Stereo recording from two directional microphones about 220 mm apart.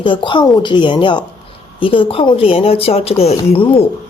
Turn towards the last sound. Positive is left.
turn(degrees=25)  # may be behind; listen again after turning